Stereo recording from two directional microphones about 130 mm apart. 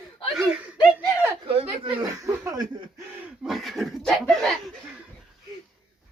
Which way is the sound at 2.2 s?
25° right (ahead or behind).